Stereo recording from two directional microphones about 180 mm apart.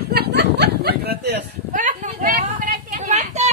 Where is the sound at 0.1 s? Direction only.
65° right (ahead or behind).